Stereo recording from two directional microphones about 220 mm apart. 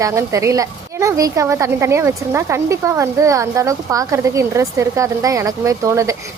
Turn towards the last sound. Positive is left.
turn(degrees=-15)  # may be behind; listen again after turning